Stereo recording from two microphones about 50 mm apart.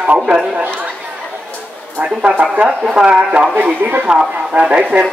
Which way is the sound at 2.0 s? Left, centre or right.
Centre.